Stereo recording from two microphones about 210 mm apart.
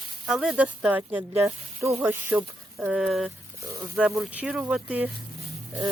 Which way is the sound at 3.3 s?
15° right (ahead or behind).